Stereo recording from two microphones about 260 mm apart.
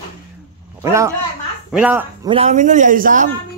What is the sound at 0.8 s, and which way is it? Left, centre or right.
Speech, centre.